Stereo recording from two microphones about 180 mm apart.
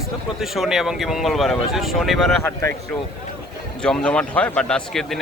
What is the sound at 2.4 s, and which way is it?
Speech, 15° left (ahead or behind).